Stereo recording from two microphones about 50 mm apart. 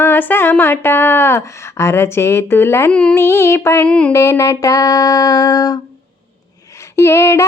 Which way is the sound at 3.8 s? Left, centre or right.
Left.